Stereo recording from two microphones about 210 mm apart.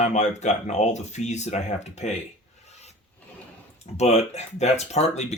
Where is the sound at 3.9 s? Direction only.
30° left (ahead or behind).